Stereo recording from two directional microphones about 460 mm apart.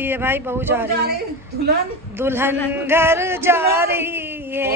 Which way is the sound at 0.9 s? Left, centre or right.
Right.